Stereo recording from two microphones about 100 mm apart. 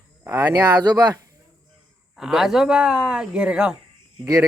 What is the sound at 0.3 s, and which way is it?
Speech, 30° right (ahead or behind).